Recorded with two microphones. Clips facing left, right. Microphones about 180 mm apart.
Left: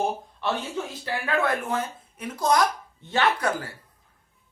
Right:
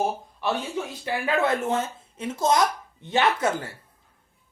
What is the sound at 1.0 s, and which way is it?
Speech, 20° right (ahead or behind).